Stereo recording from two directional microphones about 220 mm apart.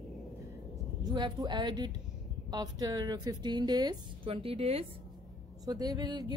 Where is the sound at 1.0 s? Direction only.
20° right (ahead or behind).